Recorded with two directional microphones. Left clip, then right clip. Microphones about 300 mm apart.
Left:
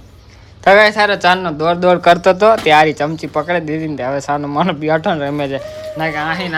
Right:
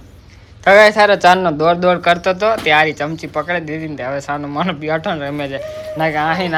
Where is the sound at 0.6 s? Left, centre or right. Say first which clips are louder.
Right 1 dB; centre.